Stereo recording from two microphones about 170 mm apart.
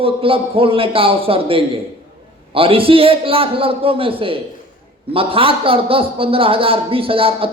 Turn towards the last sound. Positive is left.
turn(degrees=-35)  # may be behind; listen again after turning